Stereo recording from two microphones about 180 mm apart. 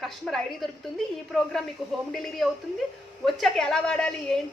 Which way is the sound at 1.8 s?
Centre (ahead or behind).